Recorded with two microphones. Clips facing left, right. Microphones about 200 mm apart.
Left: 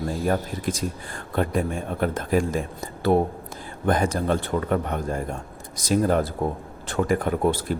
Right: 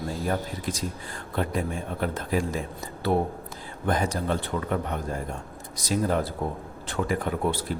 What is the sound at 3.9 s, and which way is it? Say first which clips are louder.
Speech: left 4 dB; 50° left (ahead or behind).